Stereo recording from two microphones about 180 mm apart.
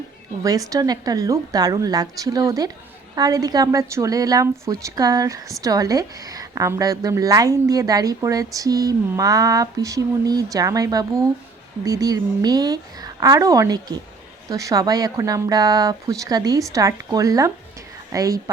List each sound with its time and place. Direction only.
0.4 s a woman's voice: 20° right (ahead or behind)